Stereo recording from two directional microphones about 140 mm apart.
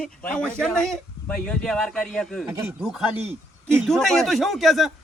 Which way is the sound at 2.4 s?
20° right (ahead or behind).